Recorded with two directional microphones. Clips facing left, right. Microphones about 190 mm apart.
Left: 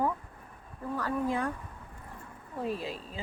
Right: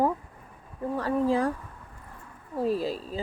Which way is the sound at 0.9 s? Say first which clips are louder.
Right 6 dB; 30° right (ahead or behind).